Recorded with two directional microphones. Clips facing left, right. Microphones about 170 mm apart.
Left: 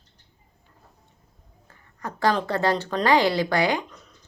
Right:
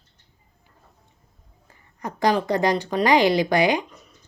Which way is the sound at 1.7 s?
15° right (ahead or behind).